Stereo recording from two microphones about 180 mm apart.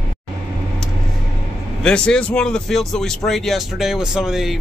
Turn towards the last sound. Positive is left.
turn(degrees=0)  # may be behind; listen again after turning